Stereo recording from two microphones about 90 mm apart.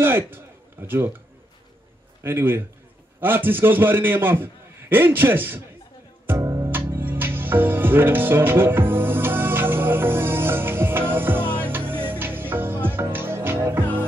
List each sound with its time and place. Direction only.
0.0 s a sound: 25° right (ahead or behind)
0.8 s a man's voice: 25° right (ahead or behind)
2.2 s a man's voice: 25° right (ahead or behind)
6.4 s music: 35° right (ahead or behind)
6.7 s music: 25° right (ahead or behind)